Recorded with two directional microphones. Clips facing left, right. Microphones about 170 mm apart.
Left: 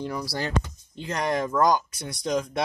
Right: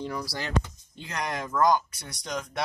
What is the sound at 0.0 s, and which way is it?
Speech, 5° left (ahead or behind).